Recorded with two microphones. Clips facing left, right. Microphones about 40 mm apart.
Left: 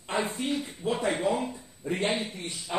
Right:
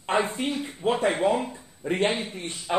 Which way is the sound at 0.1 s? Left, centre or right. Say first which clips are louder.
Right 4 dB; right.